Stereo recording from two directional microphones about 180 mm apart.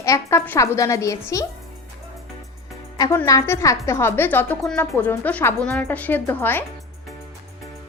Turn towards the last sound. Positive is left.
turn(degrees=10)  # may be behind; listen again after turning